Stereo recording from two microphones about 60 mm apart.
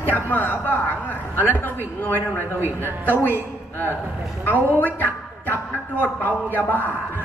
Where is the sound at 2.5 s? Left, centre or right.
Right.